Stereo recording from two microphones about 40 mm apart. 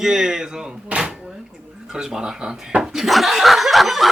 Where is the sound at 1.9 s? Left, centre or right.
Centre.